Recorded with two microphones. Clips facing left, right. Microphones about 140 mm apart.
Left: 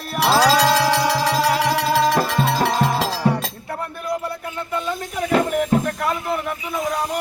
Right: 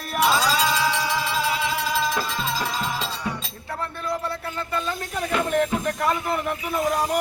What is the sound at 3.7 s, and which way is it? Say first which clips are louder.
Music: left 1 dB; 15° left (ahead or behind).